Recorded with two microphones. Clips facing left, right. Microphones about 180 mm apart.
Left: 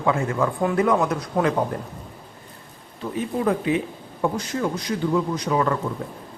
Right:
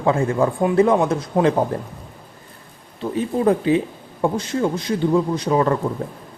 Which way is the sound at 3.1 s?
30° right (ahead or behind).